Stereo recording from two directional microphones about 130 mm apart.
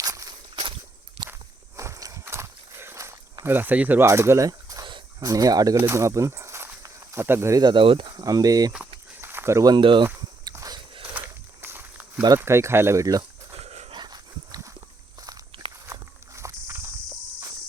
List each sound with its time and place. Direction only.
0.0 s walk: 30° right (ahead or behind)
1.2 s walk: 50° right (ahead or behind)
1.7 s walk: 25° right (ahead or behind)
3.4 s speech: 15° right (ahead or behind)
5.7 s snake: 20° right (ahead or behind)
7.6 s speech: 40° right (ahead or behind)
9.2 s a sound: 20° right (ahead or behind)
9.7 s speech: 40° right (ahead or behind)
10.4 s biting: 30° right (ahead or behind)
11.6 s snake: 15° right (ahead or behind)
12.4 s speech: 20° right (ahead or behind)
13.6 s dog: 55° right (ahead or behind)
13.9 s dog: 35° right (ahead or behind)
15.9 s walk: 25° right (ahead or behind)